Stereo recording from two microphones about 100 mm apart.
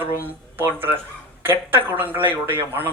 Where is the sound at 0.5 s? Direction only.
20° right (ahead or behind).